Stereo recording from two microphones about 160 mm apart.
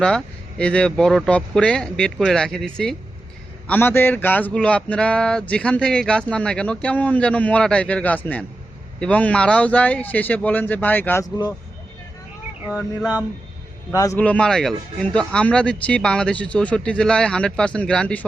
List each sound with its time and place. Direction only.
0.6 s speech: 5° left (ahead or behind)
12.6 s a sound: 10° right (ahead or behind)
13.9 s a man's voice: 20° left (ahead or behind)
14.2 s speech: 5° left (ahead or behind)